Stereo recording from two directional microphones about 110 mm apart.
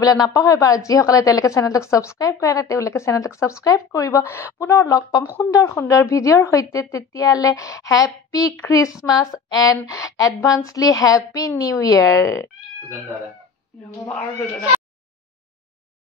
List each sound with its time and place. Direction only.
0.0 s a woman's voice: 35° left (ahead or behind)